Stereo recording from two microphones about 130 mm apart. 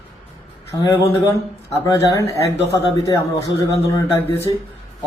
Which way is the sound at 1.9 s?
25° left (ahead or behind).